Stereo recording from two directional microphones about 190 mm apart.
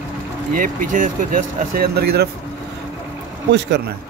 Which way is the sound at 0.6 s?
45° right (ahead or behind).